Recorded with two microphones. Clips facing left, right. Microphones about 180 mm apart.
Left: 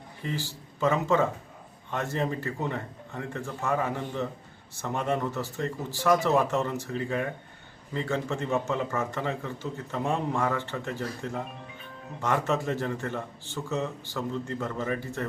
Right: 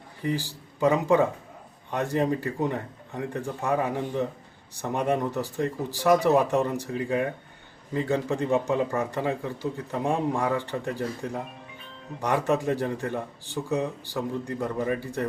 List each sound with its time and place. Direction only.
0.2 s a man's voice: 15° right (ahead or behind)